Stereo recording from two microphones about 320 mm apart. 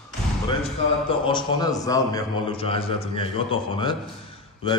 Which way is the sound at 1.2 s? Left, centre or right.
Centre.